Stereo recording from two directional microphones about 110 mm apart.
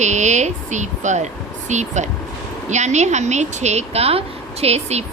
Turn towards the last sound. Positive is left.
turn(degrees=-70)  # may be behind; listen again after turning